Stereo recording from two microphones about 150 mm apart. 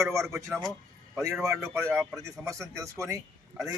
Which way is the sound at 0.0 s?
20° right (ahead or behind).